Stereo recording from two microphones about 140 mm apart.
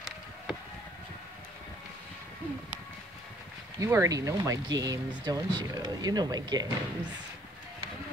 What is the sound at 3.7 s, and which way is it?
Speech, 20° right (ahead or behind).